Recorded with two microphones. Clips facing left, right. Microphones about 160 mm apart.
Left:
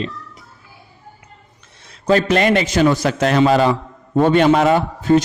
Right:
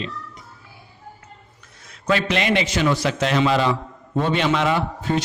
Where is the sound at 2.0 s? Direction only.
40° left (ahead or behind).